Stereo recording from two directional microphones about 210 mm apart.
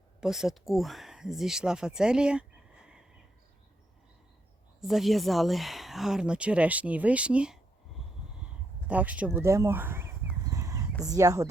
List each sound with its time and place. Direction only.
0.2 s speech: centre (ahead or behind)
4.8 s speech: centre (ahead or behind)
8.9 s speech: 5° right (ahead or behind)
10.5 s a sound: 15° right (ahead or behind)
11.0 s speech: 15° right (ahead or behind)